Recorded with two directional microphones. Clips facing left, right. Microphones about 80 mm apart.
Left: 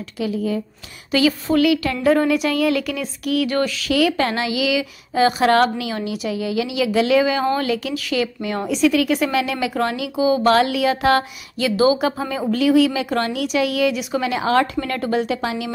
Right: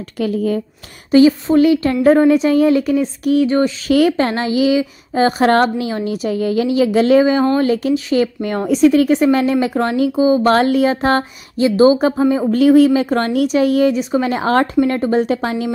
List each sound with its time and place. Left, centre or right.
0.2 s speech: right
1.1 s speech: right